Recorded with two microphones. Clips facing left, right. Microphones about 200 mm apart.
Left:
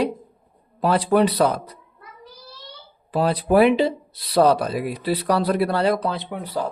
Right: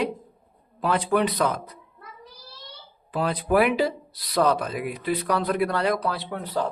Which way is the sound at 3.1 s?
35° left (ahead or behind).